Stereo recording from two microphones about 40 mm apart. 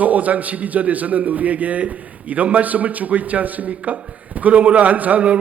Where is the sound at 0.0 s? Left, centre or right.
Right.